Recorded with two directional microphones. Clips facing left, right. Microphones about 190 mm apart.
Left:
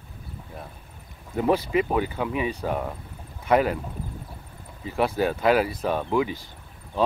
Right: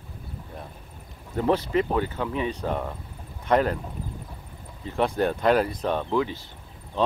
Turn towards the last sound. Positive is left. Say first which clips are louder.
# left 1 dB
turn(degrees=10)  # may be behind; listen again after turning